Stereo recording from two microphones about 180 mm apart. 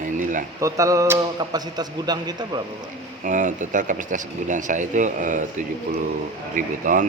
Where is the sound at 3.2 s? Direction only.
45° right (ahead or behind).